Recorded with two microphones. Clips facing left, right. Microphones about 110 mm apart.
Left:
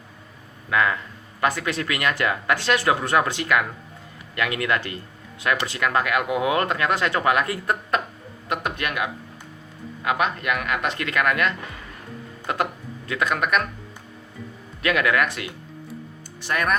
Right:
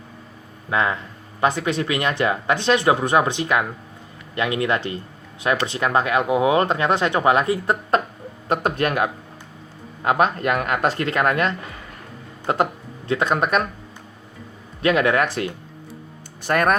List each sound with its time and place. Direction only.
0.7 s speech: 25° right (ahead or behind)
14.8 s speech: 30° right (ahead or behind)
16.4 s speech: 45° right (ahead or behind)